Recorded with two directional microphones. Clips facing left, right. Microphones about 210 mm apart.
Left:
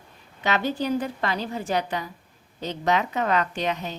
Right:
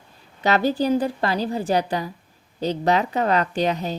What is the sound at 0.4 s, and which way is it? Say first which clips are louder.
A woman's voice: right 5 dB; 35° right (ahead or behind).